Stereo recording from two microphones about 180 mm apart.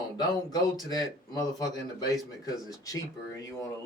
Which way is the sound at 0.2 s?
20° left (ahead or behind).